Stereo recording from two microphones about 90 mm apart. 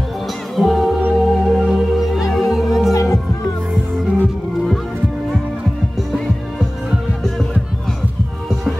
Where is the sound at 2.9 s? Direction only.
40° left (ahead or behind).